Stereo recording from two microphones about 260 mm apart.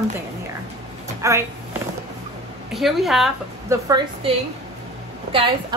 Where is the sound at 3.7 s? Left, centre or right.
Centre.